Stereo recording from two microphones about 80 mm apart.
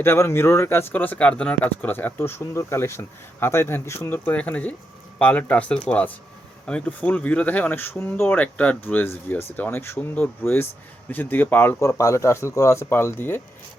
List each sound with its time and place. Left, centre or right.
0.0 s speech: left
4.1 s speech: left
11.8 s speech: left
12.9 s speech: left